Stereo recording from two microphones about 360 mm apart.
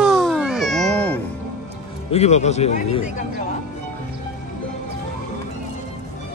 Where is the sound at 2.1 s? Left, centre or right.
Centre.